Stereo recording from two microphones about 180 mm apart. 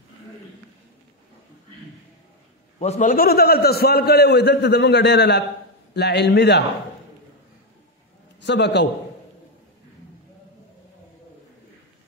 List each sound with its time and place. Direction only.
2.8 s a man's voice: 40° left (ahead or behind); by 6.6 s 65° left (ahead or behind)
8.4 s a man's voice: 75° left (ahead or behind)